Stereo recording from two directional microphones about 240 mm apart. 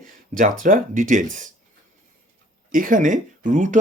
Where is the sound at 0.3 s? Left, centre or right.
Right.